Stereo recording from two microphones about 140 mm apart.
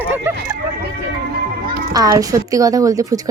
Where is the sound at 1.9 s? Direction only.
25° right (ahead or behind).